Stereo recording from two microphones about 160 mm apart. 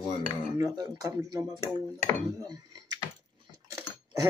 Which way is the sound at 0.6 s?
20° right (ahead or behind).